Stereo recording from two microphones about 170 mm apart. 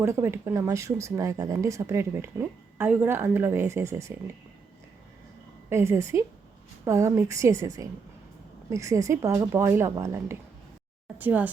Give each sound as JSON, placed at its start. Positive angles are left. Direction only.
{"t": 0.0, "sound": "speech", "side_deg": -15}
{"t": 5.6, "sound": "speech", "side_deg": -15}